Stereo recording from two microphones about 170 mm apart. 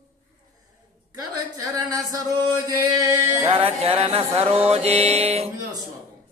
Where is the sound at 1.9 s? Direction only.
20° right (ahead or behind).